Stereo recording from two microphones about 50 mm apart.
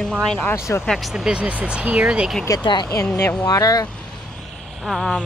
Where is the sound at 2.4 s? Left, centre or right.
Left.